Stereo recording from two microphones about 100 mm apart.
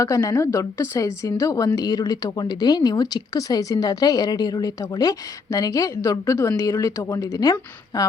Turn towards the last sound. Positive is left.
turn(degrees=40)  # may be behind; listen again after turning